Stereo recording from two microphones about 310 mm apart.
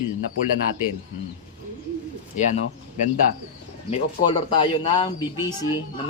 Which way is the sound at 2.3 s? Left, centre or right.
Left.